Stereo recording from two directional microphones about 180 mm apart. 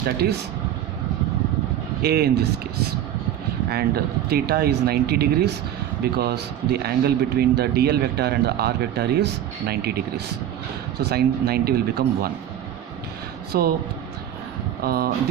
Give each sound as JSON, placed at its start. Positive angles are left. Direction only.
{"t": 2.0, "sound": "a man's voice", "side_deg": -60}
{"t": 3.7, "sound": "a man's voice", "side_deg": -60}
{"t": 11.0, "sound": "a man's voice", "side_deg": -60}
{"t": 13.5, "sound": "a man's voice", "side_deg": -60}
{"t": 14.8, "sound": "a man's voice", "side_deg": -60}